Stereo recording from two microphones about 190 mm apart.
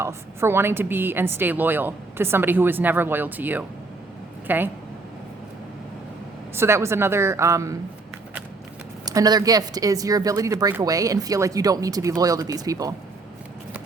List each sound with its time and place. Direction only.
0.0 s a woman's voice: 15° right (ahead or behind)
6.6 s a woman's voice: 15° right (ahead or behind)
9.0 s speech: 20° right (ahead or behind)